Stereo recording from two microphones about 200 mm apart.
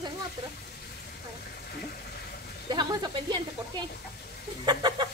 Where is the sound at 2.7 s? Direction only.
20° right (ahead or behind).